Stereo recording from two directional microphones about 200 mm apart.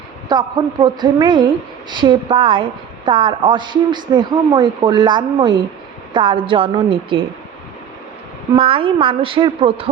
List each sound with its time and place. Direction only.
0.3 s speech: 20° right (ahead or behind)
8.5 s speech: 25° right (ahead or behind)